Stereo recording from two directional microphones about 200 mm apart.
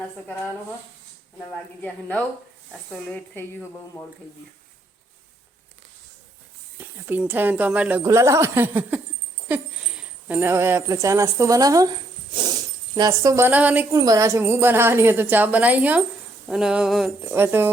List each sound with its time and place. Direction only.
1.8 s speech: 5° left (ahead or behind)
6.7 s speech: 10° right (ahead or behind)
10.0 s a woman's voice: 10° right (ahead or behind)
16.5 s a sound: 5° right (ahead or behind)